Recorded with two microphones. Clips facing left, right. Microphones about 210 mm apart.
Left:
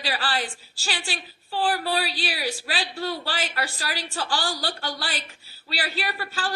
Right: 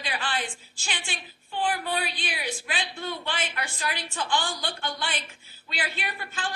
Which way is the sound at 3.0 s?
35° left (ahead or behind).